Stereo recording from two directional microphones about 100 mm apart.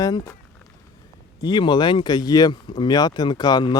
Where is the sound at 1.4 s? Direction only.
50° left (ahead or behind).